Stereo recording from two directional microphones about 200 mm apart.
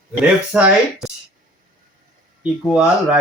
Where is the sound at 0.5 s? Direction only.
5° right (ahead or behind).